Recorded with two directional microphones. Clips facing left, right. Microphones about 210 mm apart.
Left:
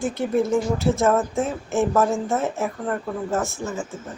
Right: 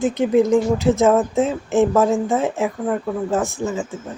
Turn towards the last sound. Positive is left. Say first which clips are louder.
# right 4 dB
turn(degrees=-15)  # may be behind; listen again after turning